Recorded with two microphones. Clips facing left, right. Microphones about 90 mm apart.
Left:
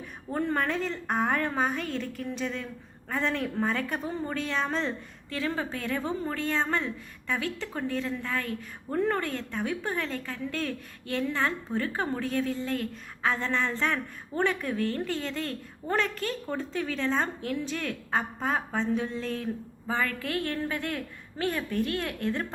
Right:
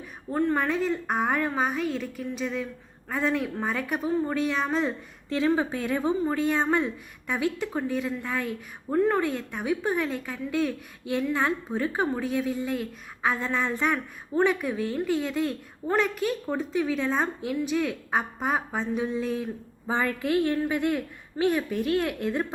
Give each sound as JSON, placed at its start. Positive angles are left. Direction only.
{"t": 0.3, "sound": "a woman's voice", "side_deg": 0}
{"t": 5.3, "sound": "a woman's voice", "side_deg": -20}
{"t": 9.0, "sound": "a woman's voice", "side_deg": -5}